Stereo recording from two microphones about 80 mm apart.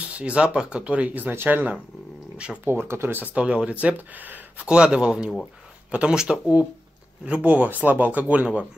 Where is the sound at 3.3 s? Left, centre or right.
Centre.